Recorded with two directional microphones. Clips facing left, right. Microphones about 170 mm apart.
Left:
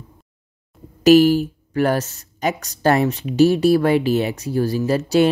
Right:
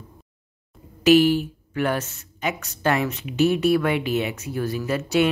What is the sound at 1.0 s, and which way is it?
Speech, 40° left (ahead or behind).